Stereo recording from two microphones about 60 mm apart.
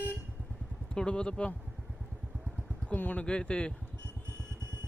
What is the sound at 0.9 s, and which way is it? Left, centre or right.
Speech, centre.